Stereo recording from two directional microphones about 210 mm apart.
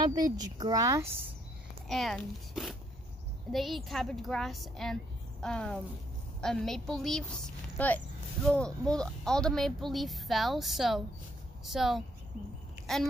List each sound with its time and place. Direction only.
0.1 s speech: 20° right (ahead or behind)
1.9 s speech: centre (ahead or behind)